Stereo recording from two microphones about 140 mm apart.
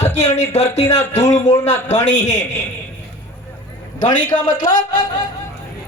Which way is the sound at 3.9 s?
65° left (ahead or behind).